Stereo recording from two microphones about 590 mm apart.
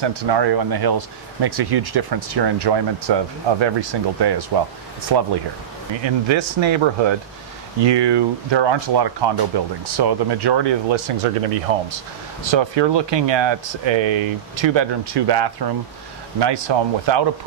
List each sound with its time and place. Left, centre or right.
0.0 s speech: right
6.2 s speech: right
11.7 s speech: right
12.4 s speech: right